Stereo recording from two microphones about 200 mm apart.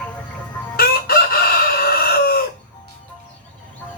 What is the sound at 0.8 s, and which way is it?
Chicken, 50° left (ahead or behind).